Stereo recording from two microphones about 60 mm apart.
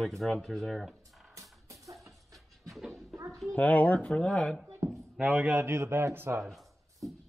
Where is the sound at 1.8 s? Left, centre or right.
Right.